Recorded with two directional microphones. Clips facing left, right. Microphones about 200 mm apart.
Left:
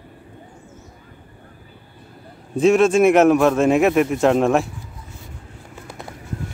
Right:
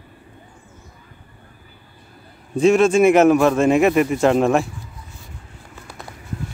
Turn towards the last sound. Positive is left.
turn(degrees=25)  # may be behind; listen again after turning